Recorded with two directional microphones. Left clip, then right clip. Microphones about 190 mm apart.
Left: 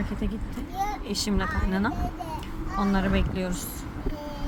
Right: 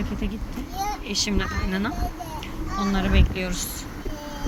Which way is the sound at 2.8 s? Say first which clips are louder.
Right 1 dB; 40° left (ahead or behind).